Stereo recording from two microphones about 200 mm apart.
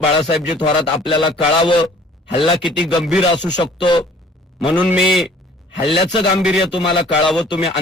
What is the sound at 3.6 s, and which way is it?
Speech, 25° left (ahead or behind).